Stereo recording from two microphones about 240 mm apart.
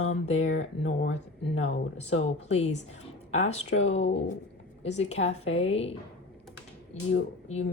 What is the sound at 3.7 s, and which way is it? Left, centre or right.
Speech, left.